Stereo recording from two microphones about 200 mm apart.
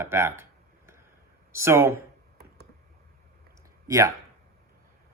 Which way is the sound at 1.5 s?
15° right (ahead or behind).